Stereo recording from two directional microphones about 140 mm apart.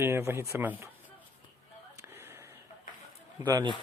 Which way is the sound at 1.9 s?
20° right (ahead or behind).